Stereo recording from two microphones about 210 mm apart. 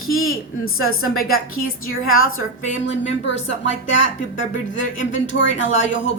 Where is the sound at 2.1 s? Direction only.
75° left (ahead or behind).